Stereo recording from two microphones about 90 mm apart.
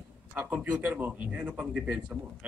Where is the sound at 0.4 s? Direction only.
15° right (ahead or behind).